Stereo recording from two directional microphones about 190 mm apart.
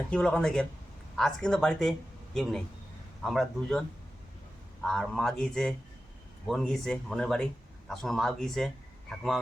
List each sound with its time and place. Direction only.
0.1 s a man's voice: 5° left (ahead or behind)